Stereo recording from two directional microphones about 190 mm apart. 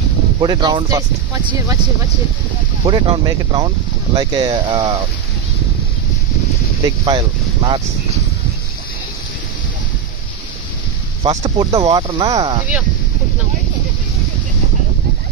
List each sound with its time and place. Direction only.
0.4 s speech: 25° right (ahead or behind)
2.8 s speech: 25° right (ahead or behind)
7.1 s speech: 25° right (ahead or behind)
11.2 s speech: 25° right (ahead or behind)